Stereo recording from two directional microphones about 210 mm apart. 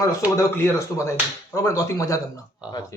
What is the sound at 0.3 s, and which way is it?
Speech, 10° left (ahead or behind).